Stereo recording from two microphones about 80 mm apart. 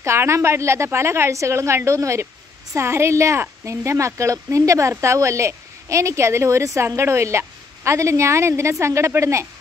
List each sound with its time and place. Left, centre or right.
0.0 s a woman's voice: right